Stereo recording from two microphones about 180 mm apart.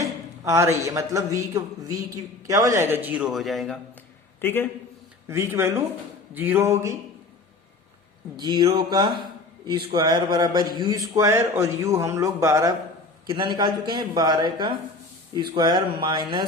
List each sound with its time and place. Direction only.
0.0 s a man's voice: 15° right (ahead or behind); by 3.8 s centre (ahead or behind)
4.4 s a man's voice: 10° left (ahead or behind)
5.3 s speech: 15° right (ahead or behind)
8.4 s a man's voice: 25° right (ahead or behind)